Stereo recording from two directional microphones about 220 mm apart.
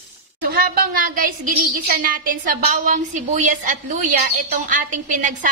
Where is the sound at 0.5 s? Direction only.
45° right (ahead or behind).